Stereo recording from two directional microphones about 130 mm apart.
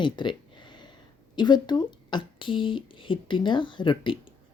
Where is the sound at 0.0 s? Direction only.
35° left (ahead or behind).